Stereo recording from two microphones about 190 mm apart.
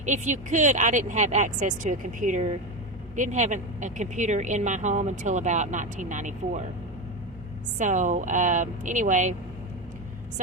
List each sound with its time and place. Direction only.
0.0 s speech: 40° right (ahead or behind)
7.8 s speech: 40° right (ahead or behind)